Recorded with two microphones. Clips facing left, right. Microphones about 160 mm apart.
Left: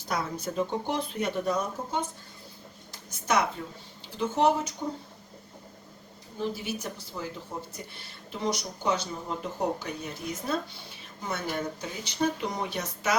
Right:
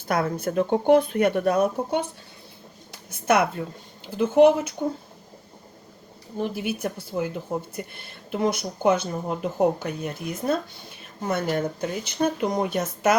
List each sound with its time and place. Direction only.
0.1 s speech: 55° right (ahead or behind)
6.3 s speech: 60° right (ahead or behind)